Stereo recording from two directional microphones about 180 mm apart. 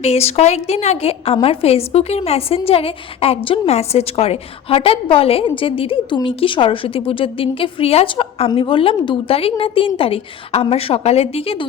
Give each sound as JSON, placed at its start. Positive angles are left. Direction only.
{"t": 0.0, "sound": "a woman's voice", "side_deg": 35}